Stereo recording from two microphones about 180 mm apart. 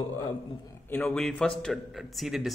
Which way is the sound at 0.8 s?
5° left (ahead or behind).